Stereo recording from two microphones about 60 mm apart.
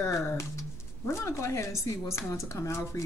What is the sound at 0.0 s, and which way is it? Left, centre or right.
Speech, left.